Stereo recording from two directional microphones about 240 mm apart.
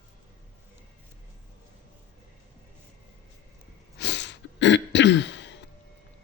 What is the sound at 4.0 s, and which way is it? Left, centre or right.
Throat clearing, left.